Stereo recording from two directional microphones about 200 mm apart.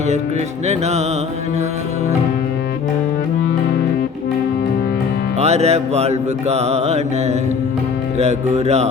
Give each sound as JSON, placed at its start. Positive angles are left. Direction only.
{"t": 0.7, "sound": "music", "side_deg": -35}
{"t": 5.4, "sound": "music", "side_deg": -30}